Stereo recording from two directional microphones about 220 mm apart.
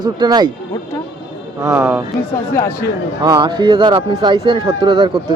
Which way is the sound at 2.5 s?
15° left (ahead or behind).